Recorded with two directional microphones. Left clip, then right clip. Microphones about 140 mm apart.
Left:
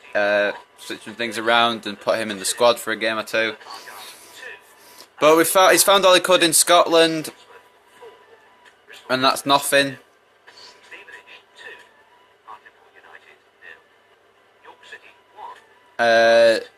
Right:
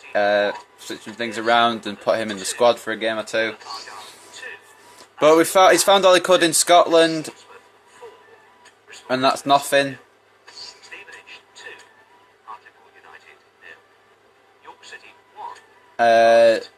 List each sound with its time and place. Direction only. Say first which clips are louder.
0.1 s speech: right 1 dB; 20° right (ahead or behind)
3.6 s a sound: right 2 dB; 20° right (ahead or behind)
4.9 s speech: even; 15° right (ahead or behind)
9.0 s speech: even; 5° right (ahead or behind)
10.9 s television: even; 25° right (ahead or behind)
16.0 s speech: right 1 dB; 5° right (ahead or behind)